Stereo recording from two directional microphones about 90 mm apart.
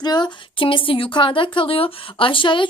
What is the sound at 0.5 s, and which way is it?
A woman's voice, 75° left (ahead or behind).